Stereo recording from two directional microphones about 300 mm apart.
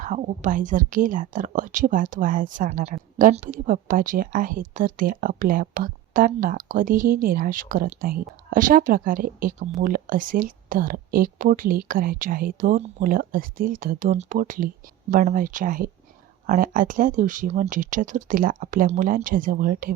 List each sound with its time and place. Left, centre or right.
0.0 s a woman's voice: right